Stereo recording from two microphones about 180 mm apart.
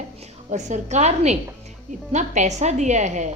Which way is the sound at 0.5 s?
40° right (ahead or behind).